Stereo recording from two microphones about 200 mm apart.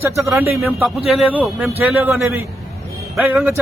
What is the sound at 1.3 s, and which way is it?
A man's voice, 5° right (ahead or behind).